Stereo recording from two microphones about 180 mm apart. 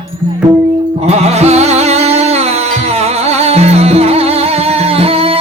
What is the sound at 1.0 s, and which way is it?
Music, 35° right (ahead or behind).